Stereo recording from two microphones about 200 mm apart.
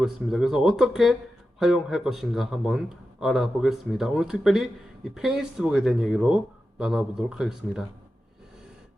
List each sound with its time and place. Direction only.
0.0 s speech: centre (ahead or behind)